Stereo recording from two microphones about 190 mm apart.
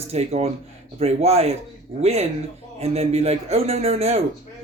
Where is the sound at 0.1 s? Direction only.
35° right (ahead or behind).